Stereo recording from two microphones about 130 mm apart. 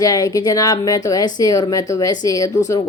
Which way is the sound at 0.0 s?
30° left (ahead or behind).